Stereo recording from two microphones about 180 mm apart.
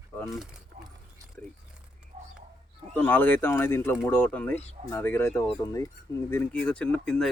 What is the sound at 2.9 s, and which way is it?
Speech, 10° left (ahead or behind).